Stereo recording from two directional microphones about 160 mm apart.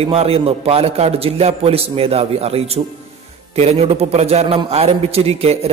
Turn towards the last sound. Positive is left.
turn(degrees=-40)  # may be behind; listen again after turning